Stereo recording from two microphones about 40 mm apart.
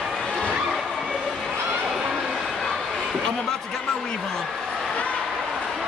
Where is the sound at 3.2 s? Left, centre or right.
Centre.